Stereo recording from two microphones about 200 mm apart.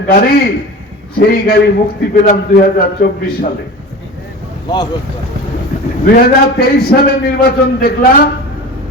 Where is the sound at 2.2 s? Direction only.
45° left (ahead or behind).